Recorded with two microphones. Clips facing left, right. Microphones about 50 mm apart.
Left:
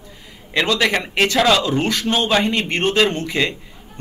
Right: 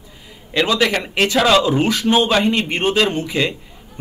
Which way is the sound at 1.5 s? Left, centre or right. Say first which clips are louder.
Right 3 dB; centre.